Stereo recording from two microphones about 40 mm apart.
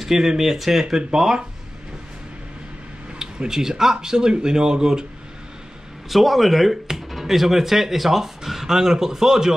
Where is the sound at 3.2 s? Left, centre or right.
Centre.